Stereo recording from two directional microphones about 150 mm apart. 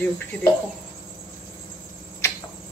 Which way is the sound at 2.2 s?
20° left (ahead or behind).